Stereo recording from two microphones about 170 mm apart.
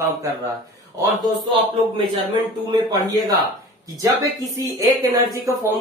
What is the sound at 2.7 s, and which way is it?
Speech, 25° right (ahead or behind).